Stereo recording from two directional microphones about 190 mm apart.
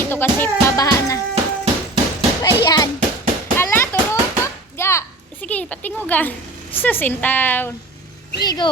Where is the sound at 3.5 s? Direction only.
10° left (ahead or behind).